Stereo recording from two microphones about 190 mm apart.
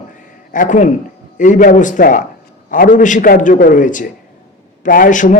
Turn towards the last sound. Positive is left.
turn(degrees=40)  # may be behind; listen again after turning